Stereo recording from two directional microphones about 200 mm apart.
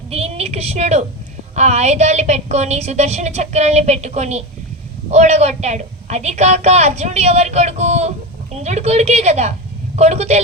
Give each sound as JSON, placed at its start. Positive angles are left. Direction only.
{"t": 0.1, "sound": "a woman's voice", "side_deg": -30}